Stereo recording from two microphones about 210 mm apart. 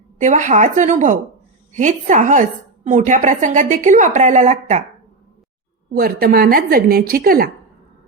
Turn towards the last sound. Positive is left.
turn(degrees=-45)  # may be behind; listen again after turning